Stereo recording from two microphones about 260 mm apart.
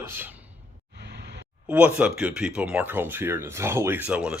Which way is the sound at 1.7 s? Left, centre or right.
Centre.